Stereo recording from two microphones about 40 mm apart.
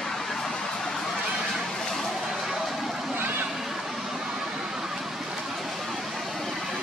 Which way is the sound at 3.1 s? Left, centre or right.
Right.